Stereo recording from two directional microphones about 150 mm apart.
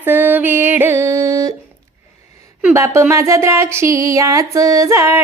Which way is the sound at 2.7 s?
20° right (ahead or behind).